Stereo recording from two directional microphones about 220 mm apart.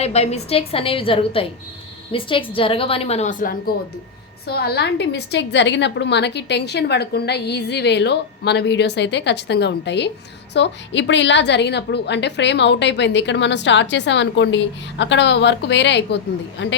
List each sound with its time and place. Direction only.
0.0 s a woman's voice: 30° left (ahead or behind); by 16.7 s 55° left (ahead or behind)